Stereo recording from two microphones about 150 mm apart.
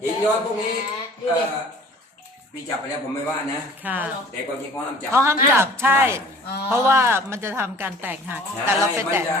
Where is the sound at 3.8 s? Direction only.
10° right (ahead or behind).